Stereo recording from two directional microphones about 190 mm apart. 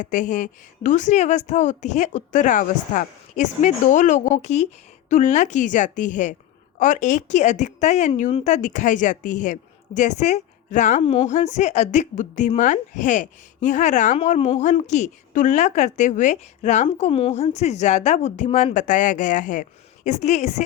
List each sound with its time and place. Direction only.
0.0 s a woman's voice: 40° left (ahead or behind)